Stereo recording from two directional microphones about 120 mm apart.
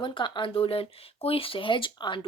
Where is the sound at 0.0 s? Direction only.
40° left (ahead or behind).